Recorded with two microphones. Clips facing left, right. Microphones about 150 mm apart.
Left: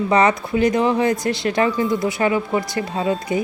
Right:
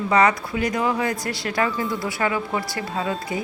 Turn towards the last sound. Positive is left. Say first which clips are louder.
# left 5 dB
turn(degrees=25)  # may be behind; listen again after turning